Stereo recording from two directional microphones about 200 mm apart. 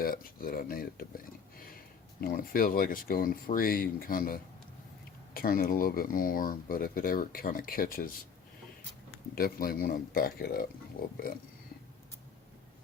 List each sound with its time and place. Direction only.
0.0 s speech: 45° left (ahead or behind)
9.3 s speech: 50° left (ahead or behind)